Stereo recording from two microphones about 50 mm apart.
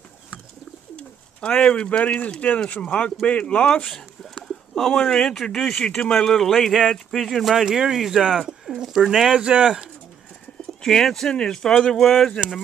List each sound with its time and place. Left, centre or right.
0.9 s speech: left
3.8 s bird: centre
5.0 s speech: centre
9.3 s speech: centre
10.8 s speech: centre